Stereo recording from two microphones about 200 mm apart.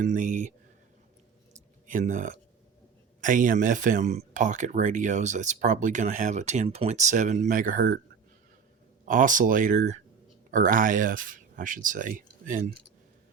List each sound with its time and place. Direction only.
0.0 s speech: 40° right (ahead or behind)
1.9 s speech: 40° right (ahead or behind)
9.0 s speech: 40° right (ahead or behind)